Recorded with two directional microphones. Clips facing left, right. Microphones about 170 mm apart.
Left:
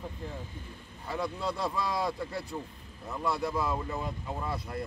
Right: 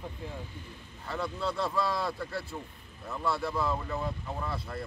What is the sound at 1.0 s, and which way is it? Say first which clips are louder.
Speech: even; 15° left (ahead or behind).